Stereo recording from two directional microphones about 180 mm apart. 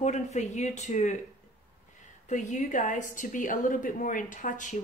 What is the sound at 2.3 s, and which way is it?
A woman's voice, 40° left (ahead or behind).